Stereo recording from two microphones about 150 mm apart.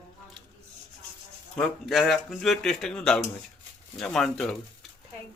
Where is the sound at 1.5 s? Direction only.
Centre (ahead or behind).